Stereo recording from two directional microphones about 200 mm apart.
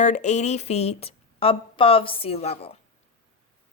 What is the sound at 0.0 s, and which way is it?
Speech, 35° left (ahead or behind).